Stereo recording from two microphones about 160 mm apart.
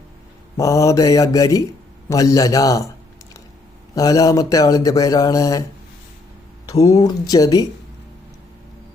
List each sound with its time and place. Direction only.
0.5 s speech: 20° left (ahead or behind)
3.9 s speech: 20° left (ahead or behind)
6.8 s speech: 20° left (ahead or behind)